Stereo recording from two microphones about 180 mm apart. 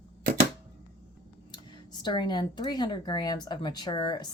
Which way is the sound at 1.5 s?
25° left (ahead or behind).